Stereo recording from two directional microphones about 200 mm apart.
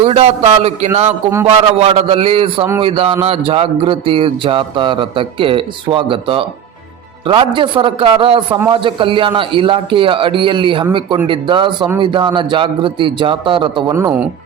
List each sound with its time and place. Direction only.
0.0 s a man's voice: 30° right (ahead or behind); by 14.3 s 10° right (ahead or behind)